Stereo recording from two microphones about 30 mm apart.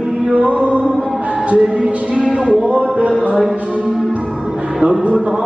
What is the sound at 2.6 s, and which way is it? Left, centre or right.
Speech, right.